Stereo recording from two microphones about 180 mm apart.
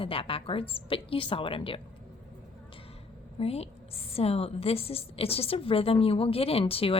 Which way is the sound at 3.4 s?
35° left (ahead or behind).